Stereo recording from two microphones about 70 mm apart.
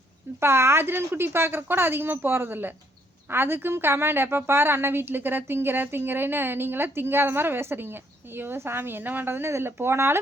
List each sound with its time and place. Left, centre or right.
0.3 s a woman's voice: right